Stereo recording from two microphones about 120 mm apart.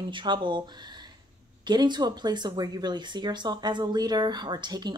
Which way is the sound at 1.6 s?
40° right (ahead or behind).